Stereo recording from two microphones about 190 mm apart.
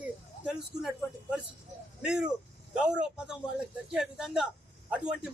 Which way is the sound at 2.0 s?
5° right (ahead or behind).